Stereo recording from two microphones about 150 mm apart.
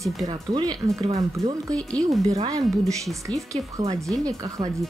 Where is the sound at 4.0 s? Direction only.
20° right (ahead or behind).